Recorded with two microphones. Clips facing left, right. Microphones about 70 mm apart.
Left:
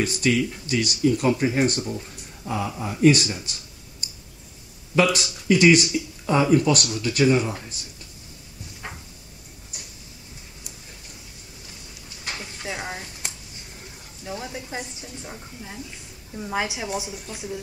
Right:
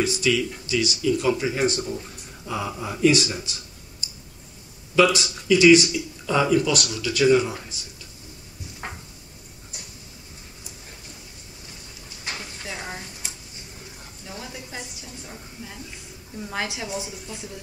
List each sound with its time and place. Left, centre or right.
0.0 s speech: left
4.9 s speech: left
5.9 s speech: left
12.6 s a sound: centre
14.2 s a sound: left
16.3 s a woman's voice: centre